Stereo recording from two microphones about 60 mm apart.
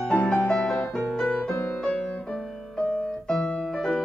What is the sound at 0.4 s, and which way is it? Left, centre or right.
Music, centre.